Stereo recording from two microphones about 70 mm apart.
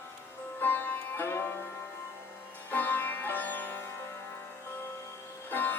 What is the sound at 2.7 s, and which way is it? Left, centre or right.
Music, left.